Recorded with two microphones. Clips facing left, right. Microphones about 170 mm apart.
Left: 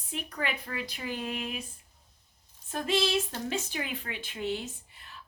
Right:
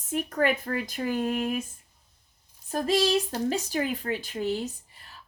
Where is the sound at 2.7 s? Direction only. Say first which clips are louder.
Right 5 dB; 40° right (ahead or behind).